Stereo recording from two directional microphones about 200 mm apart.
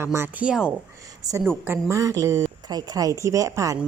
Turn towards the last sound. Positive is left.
turn(degrees=-15)  # may be behind; listen again after turning